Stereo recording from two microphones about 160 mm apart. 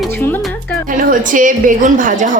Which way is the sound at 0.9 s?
55° right (ahead or behind).